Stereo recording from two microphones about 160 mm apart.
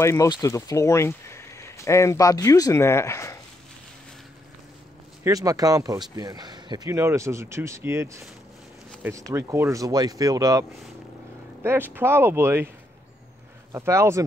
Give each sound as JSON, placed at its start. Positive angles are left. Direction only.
{"t": 0.0, "sound": "speech", "side_deg": 20}
{"t": 5.2, "sound": "speech", "side_deg": -20}
{"t": 13.7, "sound": "speech", "side_deg": -15}